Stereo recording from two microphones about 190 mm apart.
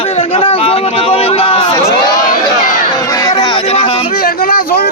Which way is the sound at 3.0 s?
20° left (ahead or behind).